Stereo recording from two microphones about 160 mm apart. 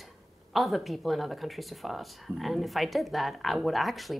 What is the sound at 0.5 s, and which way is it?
Speech, centre (ahead or behind).